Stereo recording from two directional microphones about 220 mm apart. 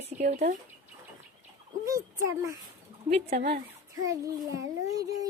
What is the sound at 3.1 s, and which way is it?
Speech, 30° right (ahead or behind).